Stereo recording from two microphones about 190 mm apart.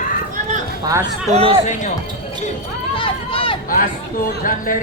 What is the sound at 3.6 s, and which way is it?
Speech, 45° left (ahead or behind).